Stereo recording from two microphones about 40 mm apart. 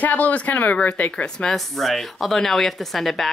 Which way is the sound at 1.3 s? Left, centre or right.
Centre.